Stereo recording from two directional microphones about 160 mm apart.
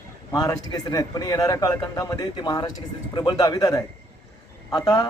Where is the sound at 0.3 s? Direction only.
20° left (ahead or behind).